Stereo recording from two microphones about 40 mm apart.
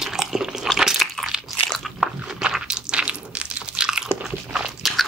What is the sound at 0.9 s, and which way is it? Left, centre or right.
Crunch, centre.